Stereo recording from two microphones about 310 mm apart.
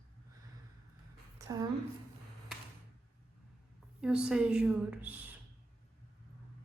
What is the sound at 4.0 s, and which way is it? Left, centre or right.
A woman's voice, centre.